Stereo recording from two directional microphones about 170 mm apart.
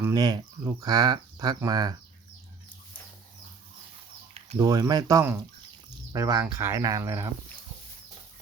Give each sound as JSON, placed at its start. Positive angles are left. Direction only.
{"t": 0.0, "sound": "speech", "side_deg": -25}
{"t": 4.5, "sound": "speech", "side_deg": -20}